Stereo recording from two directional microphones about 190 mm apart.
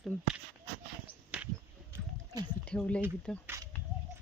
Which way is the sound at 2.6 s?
5° left (ahead or behind).